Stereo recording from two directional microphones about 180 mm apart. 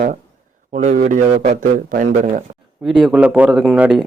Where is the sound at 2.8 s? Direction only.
Centre (ahead or behind).